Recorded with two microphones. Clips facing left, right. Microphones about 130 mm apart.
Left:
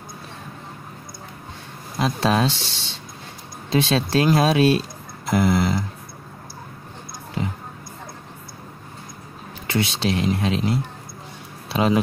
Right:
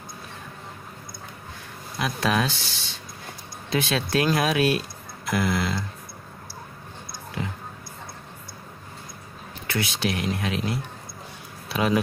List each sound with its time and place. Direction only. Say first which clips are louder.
2.0 s speech: left 4 dB; 30° left (ahead or behind)
9.7 s speech: left 4 dB; 25° left (ahead or behind)